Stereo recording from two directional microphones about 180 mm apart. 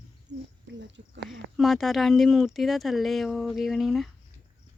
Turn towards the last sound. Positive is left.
turn(degrees=0)  # may be behind; listen again after turning